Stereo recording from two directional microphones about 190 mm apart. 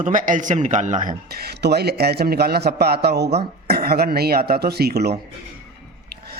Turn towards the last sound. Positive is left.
turn(degrees=-55)  # may be behind; listen again after turning